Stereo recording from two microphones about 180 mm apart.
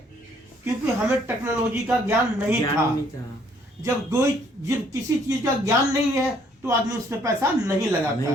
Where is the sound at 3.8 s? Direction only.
15° right (ahead or behind).